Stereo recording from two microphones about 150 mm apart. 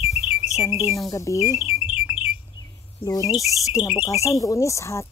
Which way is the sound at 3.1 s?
25° left (ahead or behind).